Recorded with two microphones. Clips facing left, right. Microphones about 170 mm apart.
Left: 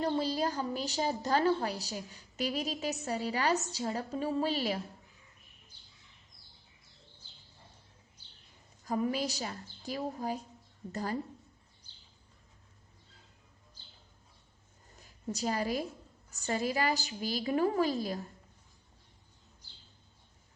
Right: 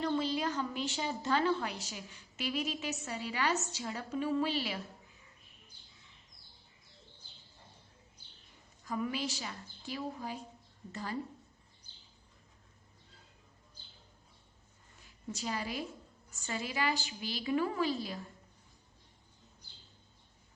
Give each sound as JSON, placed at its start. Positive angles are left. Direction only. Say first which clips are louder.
{"t": 0.0, "sound": "a woman's voice", "louder": "left 2 dB", "side_deg": 35}
{"t": 8.8, "sound": "a woman's voice", "louder": "left 4 dB", "side_deg": 40}
{"t": 14.9, "sound": "a woman's voice", "louder": "left 5 dB", "side_deg": 40}